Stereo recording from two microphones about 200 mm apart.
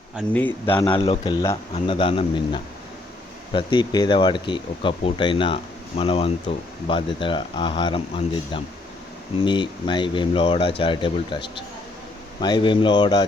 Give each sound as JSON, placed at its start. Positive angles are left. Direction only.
{"t": 0.3, "sound": "speech", "side_deg": 10}
{"t": 0.7, "sound": "speech", "side_deg": 25}